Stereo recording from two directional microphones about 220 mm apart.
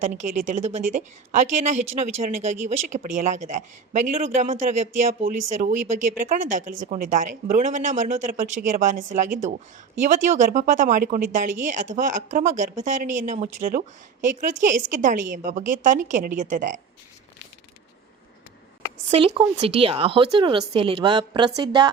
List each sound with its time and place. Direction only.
0.2 s speech: 35° right (ahead or behind)
19.1 s speech: 25° right (ahead or behind)